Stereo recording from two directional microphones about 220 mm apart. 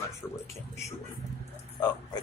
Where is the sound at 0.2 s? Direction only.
5° left (ahead or behind).